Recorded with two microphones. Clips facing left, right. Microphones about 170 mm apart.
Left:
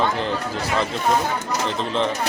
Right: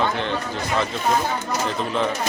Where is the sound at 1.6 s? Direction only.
5° right (ahead or behind).